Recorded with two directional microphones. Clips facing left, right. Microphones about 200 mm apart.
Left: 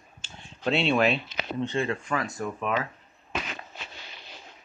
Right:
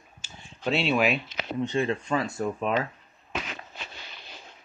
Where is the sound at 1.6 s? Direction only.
15° right (ahead or behind).